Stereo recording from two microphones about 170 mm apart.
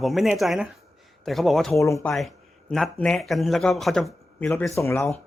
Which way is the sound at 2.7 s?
5° left (ahead or behind).